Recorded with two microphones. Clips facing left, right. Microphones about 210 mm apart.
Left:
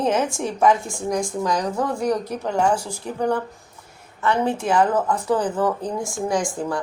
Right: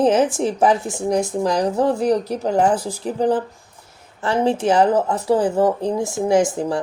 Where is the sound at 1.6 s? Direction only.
30° right (ahead or behind).